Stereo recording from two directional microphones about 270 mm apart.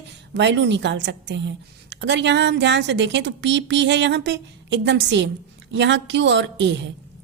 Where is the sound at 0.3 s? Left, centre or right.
Right.